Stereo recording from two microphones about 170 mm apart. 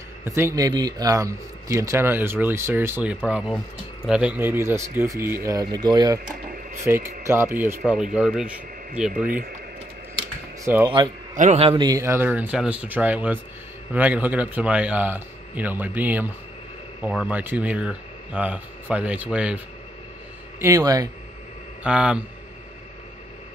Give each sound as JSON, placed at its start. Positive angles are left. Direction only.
{"t": 0.2, "sound": "speech", "side_deg": -15}
{"t": 10.6, "sound": "speech", "side_deg": -15}
{"t": 11.3, "sound": "a man's voice", "side_deg": -40}
{"t": 11.9, "sound": "speech", "side_deg": -15}
{"t": 20.5, "sound": "speech", "side_deg": -20}
{"t": 21.8, "sound": "speech", "side_deg": -5}